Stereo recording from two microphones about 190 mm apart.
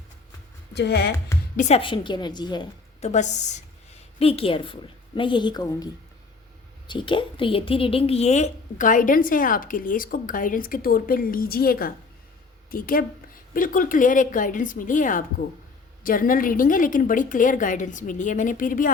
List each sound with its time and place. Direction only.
0.7 s speech: 60° left (ahead or behind)
1.5 s a woman's voice: 35° left (ahead or behind)
3.0 s a woman's voice: 40° left (ahead or behind)